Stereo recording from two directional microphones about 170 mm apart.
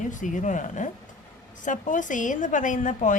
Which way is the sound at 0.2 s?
50° left (ahead or behind).